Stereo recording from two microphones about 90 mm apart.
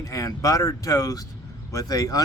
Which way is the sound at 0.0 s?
40° left (ahead or behind).